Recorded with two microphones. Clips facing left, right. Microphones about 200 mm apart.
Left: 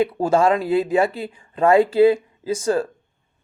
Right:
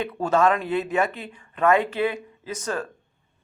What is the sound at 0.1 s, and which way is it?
Speech, 30° left (ahead or behind).